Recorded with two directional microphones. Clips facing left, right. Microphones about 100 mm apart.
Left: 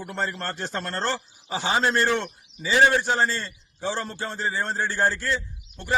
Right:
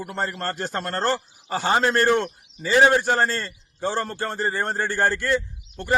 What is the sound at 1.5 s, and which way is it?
A man's voice, 50° right (ahead or behind).